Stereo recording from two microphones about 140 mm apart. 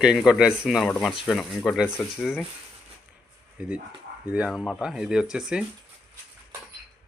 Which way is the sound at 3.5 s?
10° right (ahead or behind).